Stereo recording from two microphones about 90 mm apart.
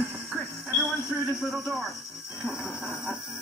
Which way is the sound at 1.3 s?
5° right (ahead or behind).